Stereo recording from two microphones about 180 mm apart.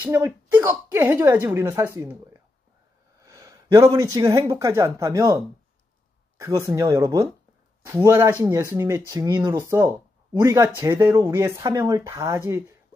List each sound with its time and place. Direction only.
0.0 s speech: 15° right (ahead or behind)